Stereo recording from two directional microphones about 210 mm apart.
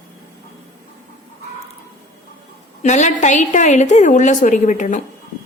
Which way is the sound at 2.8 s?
35° left (ahead or behind).